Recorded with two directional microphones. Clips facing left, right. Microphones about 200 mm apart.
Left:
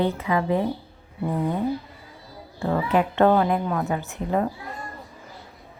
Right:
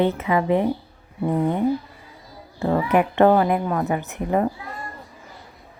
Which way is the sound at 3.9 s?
15° right (ahead or behind).